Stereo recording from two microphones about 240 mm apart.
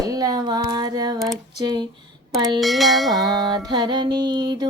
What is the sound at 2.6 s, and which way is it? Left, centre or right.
Music, centre.